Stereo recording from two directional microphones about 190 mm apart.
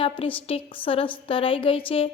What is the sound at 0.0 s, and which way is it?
A woman's voice, 30° left (ahead or behind).